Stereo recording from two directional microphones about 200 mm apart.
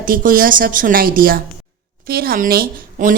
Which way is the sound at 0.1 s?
45° right (ahead or behind).